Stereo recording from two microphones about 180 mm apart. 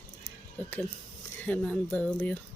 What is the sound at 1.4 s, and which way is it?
Speech, 10° left (ahead or behind).